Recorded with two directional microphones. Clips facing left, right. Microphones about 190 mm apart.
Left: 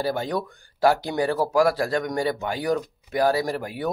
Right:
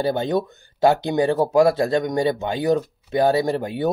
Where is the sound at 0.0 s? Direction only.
25° right (ahead or behind).